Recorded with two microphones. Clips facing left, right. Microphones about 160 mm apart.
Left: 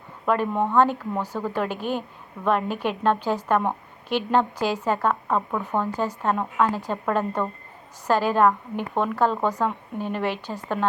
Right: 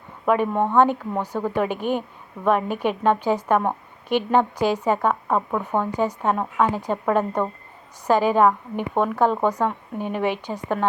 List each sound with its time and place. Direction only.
0.3 s speech: 15° right (ahead or behind)